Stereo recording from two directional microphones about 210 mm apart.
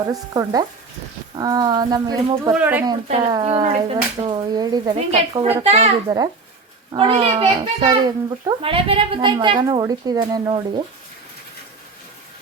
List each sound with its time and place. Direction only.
0.1 s frying: 15° right (ahead or behind)
1.4 s a child's voice: 20° right (ahead or behind)
2.5 s frying: 10° right (ahead or behind)
3.3 s a child's voice: 20° right (ahead or behind)
3.6 s a child's voice: 30° right (ahead or behind)
4.9 s a child's voice: 30° right (ahead or behind)
6.9 s a child's voice: 25° right (ahead or behind)